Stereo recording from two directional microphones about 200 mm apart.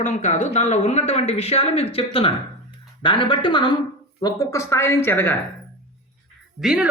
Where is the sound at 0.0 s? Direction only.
35° left (ahead or behind); by 5.4 s 10° left (ahead or behind).